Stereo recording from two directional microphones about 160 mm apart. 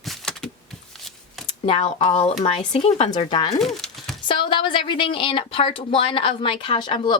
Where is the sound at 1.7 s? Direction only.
30° left (ahead or behind).